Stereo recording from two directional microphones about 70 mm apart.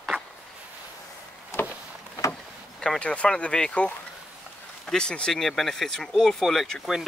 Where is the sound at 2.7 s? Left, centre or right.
Centre.